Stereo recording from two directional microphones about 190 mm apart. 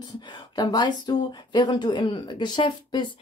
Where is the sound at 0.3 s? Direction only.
20° left (ahead or behind).